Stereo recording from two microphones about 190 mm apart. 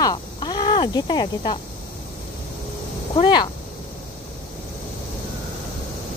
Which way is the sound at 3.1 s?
25° left (ahead or behind).